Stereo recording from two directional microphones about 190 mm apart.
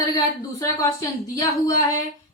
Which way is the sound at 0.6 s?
15° left (ahead or behind).